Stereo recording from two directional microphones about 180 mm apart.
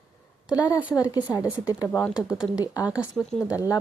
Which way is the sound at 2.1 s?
5° right (ahead or behind).